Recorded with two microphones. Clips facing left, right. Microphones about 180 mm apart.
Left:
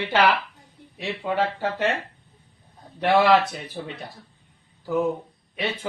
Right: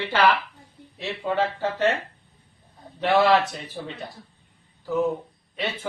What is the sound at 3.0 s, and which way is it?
Speech, 15° left (ahead or behind).